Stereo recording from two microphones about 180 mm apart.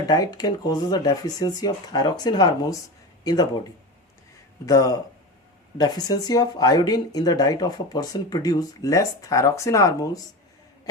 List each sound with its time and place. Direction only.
0.1 s speech: 20° left (ahead or behind)
4.6 s speech: 20° left (ahead or behind)